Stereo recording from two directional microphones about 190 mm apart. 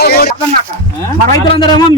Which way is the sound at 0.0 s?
55° left (ahead or behind).